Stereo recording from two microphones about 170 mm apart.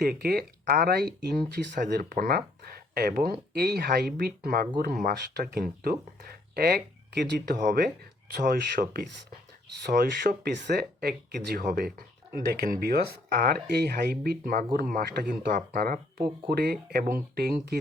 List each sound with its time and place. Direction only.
0.0 s speech: 65° right (ahead or behind)
7.6 s speech: 50° right (ahead or behind)
8.4 s speech: 60° right (ahead or behind)